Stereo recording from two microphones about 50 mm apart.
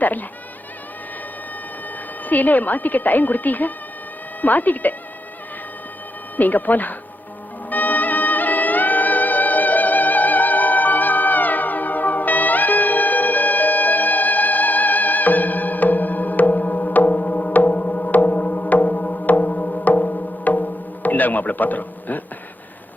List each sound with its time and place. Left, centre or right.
0.0 s a woman's voice: left
2.2 s a woman's voice: left
6.3 s a woman's voice: left
7.7 s music: left